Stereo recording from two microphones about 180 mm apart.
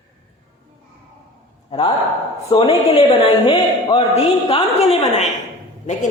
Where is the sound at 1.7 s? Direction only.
25° left (ahead or behind).